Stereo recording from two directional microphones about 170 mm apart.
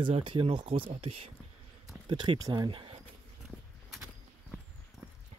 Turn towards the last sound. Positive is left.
turn(degrees=0)  # may be behind; listen again after turning